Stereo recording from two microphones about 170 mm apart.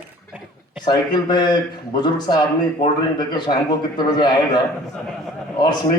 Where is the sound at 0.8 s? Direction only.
25° left (ahead or behind).